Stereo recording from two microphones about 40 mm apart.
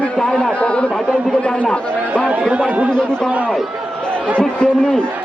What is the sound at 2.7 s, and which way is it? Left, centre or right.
Speech, right.